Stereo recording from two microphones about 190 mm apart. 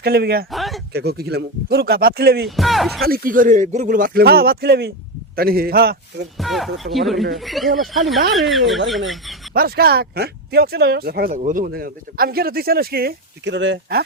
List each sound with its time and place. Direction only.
0.0 s speech: 55° right (ahead or behind)
0.5 s a sound: centre (ahead or behind)
0.9 s speech: 55° right (ahead or behind)
2.6 s speech: centre (ahead or behind)
3.1 s speech: 45° right (ahead or behind)
6.3 s speech: centre (ahead or behind)
9.6 s speech: 55° right (ahead or behind); by 14.0 s 70° right (ahead or behind)